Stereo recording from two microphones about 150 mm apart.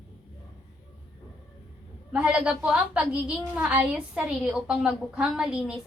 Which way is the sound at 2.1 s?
5° right (ahead or behind).